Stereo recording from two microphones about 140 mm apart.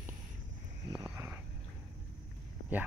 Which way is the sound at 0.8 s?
20° right (ahead or behind).